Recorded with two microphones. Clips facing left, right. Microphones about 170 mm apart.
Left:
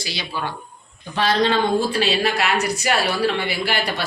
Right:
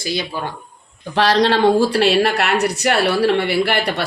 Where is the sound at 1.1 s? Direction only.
80° right.